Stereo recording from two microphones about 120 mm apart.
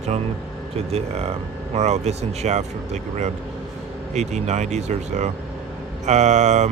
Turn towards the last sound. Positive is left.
turn(degrees=-80)